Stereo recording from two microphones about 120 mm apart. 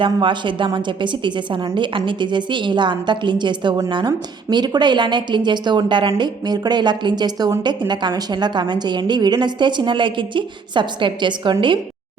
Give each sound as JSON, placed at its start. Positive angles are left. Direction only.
{"t": 0.0, "sound": "a woman's voice", "side_deg": -45}